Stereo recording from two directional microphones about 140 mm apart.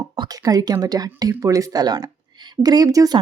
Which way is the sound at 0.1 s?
25° right (ahead or behind).